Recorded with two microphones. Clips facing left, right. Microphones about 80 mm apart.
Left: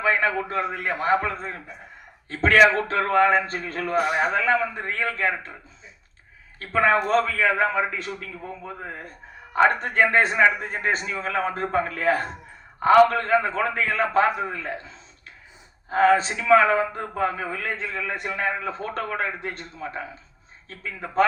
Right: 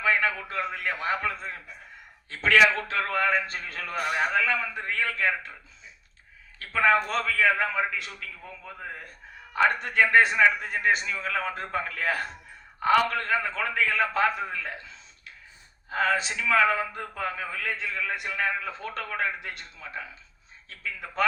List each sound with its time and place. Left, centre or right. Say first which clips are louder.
0.0 s a sound: left 3 dB; left
0.7 s a man's voice: left 7 dB; left
6.6 s a man's voice: left 3 dB; left